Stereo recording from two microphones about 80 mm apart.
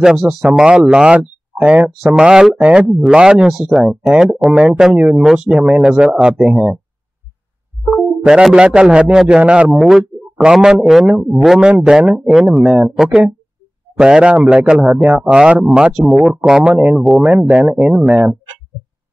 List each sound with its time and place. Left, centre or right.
0.0 s speech: centre
7.8 s speech: centre
9.4 s speech: centre
9.7 s a man's voice: centre
14.9 s speech: centre
15.1 s speech: centre